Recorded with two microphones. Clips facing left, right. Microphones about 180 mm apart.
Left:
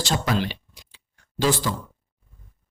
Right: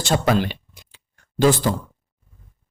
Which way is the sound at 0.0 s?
55° right (ahead or behind).